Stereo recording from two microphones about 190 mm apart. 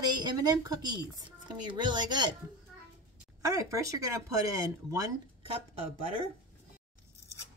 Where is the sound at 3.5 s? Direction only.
15° right (ahead or behind).